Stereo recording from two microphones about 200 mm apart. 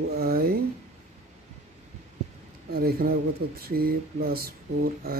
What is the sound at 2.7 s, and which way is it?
Speech, 50° right (ahead or behind).